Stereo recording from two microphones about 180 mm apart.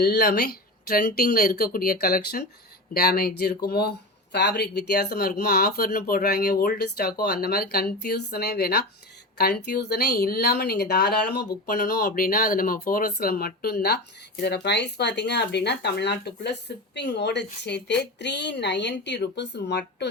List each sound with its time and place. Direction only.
0.0 s speech: 60° left (ahead or behind)